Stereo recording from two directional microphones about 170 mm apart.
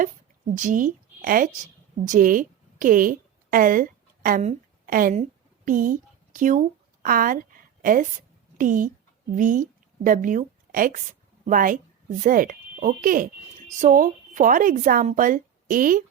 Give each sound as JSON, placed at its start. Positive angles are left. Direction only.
{"t": 0.5, "sound": "a woman's voice", "side_deg": -50}